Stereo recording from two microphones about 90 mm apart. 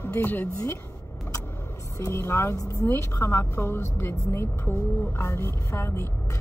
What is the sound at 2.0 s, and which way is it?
A woman's voice, 30° left (ahead or behind).